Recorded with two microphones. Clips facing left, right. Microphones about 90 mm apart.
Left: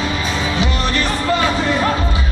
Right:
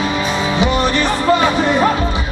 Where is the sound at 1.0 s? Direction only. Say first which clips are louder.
Right 2 dB; 20° right (ahead or behind).